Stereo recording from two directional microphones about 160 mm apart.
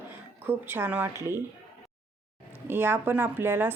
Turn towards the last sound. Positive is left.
turn(degrees=-15)  # may be behind; listen again after turning